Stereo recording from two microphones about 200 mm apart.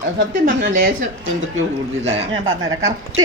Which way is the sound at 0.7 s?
40° right (ahead or behind).